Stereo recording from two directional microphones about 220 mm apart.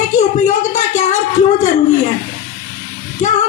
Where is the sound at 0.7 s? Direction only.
35° left (ahead or behind).